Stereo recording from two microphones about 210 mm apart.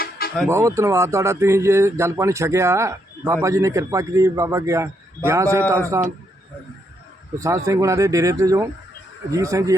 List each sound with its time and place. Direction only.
0.4 s speech: 15° right (ahead or behind)
7.3 s speech: 15° right (ahead or behind)